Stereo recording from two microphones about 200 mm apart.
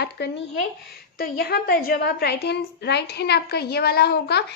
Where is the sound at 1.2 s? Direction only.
50° left (ahead or behind).